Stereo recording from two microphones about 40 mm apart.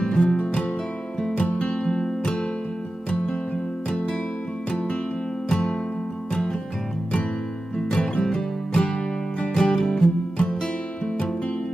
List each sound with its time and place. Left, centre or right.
0.0 s music: centre
1.5 s music: left
3.8 s music: left
7.8 s music: centre